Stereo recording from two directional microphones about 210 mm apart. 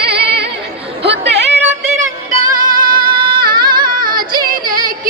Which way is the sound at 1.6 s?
35° right (ahead or behind).